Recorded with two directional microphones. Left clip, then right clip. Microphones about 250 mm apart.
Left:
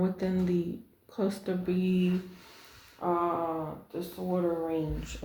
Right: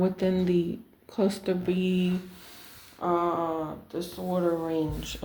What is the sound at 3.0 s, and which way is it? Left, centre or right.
Speech, right.